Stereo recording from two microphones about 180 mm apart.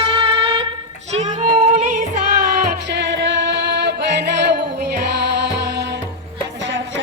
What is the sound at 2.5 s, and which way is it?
Music, 70° right (ahead or behind).